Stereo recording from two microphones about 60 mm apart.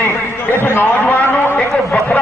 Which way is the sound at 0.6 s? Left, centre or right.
Left.